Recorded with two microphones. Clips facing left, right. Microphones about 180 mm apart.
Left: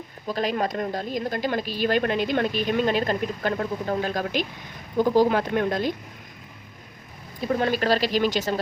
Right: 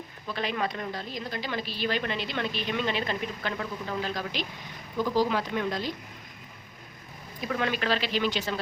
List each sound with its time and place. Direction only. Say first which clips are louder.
0.3 s a woman's voice: left 5 dB; 40° left (ahead or behind)
7.4 s speech: left 6 dB; 35° left (ahead or behind)